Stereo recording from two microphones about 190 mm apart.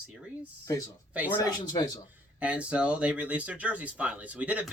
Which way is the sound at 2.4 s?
5° right (ahead or behind).